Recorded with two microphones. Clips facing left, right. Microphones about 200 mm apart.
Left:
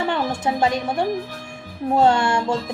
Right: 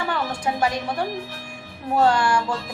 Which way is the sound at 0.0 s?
25° left (ahead or behind).